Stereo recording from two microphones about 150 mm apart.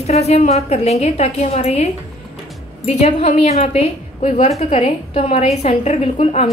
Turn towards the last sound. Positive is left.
turn(degrees=45)  # may be behind; listen again after turning